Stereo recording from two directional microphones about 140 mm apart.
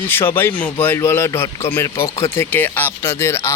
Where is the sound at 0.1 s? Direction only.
15° left (ahead or behind).